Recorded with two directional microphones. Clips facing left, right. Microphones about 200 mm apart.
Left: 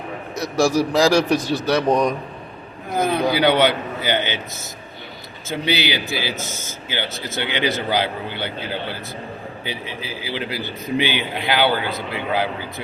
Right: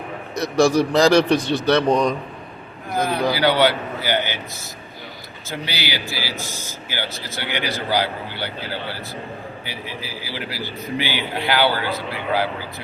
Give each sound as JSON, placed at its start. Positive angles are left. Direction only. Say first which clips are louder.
{"t": 0.6, "sound": "a man's voice", "louder": "right 1 dB", "side_deg": 5}